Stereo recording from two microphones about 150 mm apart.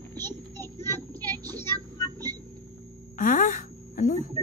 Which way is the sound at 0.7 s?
15° left (ahead or behind).